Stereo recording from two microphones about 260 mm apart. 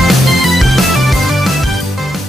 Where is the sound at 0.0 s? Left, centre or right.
Centre.